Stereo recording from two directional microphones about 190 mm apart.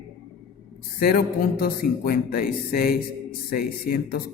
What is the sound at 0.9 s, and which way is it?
A man's voice, 50° left (ahead or behind).